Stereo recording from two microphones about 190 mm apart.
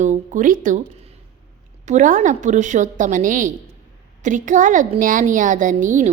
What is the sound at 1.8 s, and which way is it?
A woman's voice, 40° right (ahead or behind).